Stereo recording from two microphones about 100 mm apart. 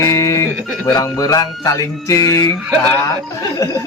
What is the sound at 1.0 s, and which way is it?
Music, 35° left (ahead or behind).